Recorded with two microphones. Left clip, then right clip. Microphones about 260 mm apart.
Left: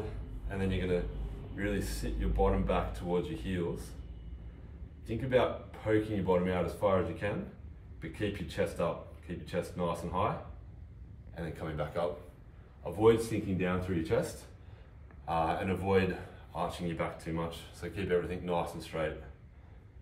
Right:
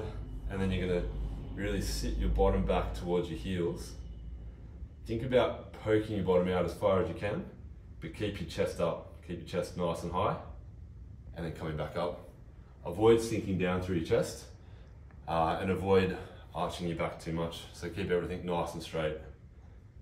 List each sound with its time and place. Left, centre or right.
0.5 s speech: centre
5.0 s speech: centre
11.3 s speech: centre